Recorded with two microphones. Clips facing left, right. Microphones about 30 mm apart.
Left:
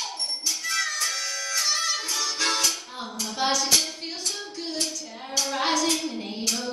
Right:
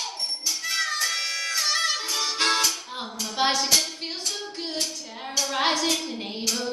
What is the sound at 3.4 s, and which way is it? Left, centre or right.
Clapping, right.